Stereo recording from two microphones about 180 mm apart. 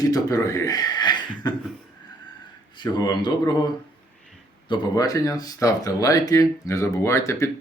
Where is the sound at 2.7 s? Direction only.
25° left (ahead or behind).